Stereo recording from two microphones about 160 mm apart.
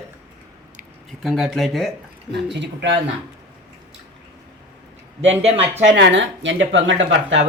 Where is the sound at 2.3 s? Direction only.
90° right.